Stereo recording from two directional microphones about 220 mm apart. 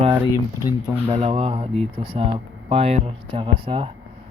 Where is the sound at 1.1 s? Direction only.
25° right (ahead or behind).